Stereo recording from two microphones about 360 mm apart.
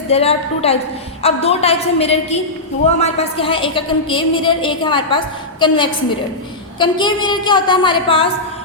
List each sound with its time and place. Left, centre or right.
0.1 s a woman's voice: centre